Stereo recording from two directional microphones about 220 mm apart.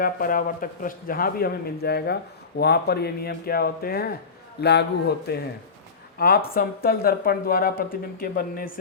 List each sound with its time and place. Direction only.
0.0 s speech: 40° left (ahead or behind)